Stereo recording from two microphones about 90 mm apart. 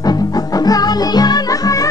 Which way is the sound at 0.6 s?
45° left (ahead or behind).